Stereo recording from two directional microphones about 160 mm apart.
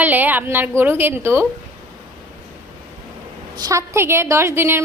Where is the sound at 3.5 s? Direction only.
20° right (ahead or behind).